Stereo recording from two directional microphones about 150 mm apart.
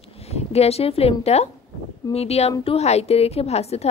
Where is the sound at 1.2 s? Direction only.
45° left (ahead or behind).